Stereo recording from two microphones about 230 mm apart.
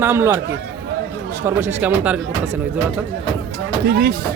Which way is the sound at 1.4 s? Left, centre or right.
Centre.